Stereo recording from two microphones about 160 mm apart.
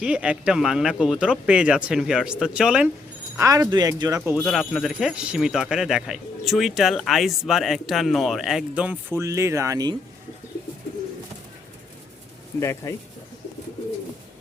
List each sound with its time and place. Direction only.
0.0 s speech: 5° right (ahead or behind)
3.3 s speech: 20° right (ahead or behind)
4.4 s speech: centre (ahead or behind); by 9.9 s 20° right (ahead or behind)
12.5 s speech: 15° left (ahead or behind)